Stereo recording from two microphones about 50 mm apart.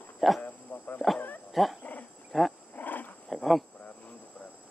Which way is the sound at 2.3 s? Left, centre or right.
Centre.